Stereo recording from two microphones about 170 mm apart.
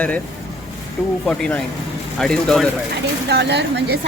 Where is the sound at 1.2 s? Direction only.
5° left (ahead or behind).